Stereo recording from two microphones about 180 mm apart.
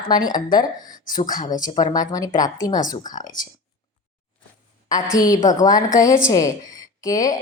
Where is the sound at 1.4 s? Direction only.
45° left (ahead or behind).